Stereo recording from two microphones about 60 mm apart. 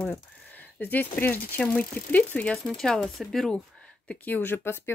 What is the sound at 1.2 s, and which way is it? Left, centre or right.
Speech, left.